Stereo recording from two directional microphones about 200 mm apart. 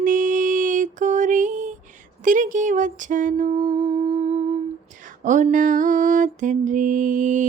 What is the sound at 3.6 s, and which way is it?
Music, 25° right (ahead or behind).